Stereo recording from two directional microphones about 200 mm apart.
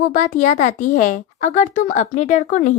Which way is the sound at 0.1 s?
40° left (ahead or behind).